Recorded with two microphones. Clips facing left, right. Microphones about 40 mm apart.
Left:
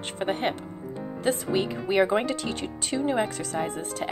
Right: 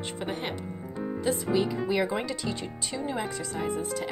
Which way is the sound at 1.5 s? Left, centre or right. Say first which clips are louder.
Left 3 dB; left.